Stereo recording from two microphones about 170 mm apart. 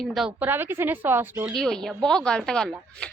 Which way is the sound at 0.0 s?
Centre (ahead or behind).